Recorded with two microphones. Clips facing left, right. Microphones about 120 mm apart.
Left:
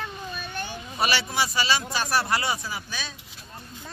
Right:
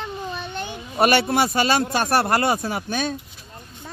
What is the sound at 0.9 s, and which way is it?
Speech, 55° right (ahead or behind).